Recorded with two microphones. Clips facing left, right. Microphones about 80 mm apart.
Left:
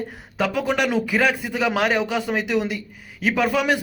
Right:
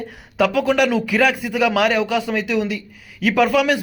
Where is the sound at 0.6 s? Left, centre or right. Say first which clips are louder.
Right 4 dB; centre.